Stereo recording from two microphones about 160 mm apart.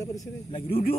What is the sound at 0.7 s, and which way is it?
Speech, 65° left (ahead or behind).